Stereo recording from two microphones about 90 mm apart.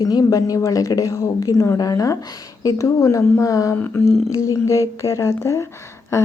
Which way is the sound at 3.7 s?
25° left (ahead or behind).